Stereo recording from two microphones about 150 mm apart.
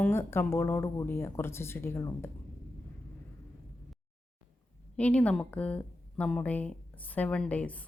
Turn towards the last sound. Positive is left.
turn(degrees=10)  # may be behind; listen again after turning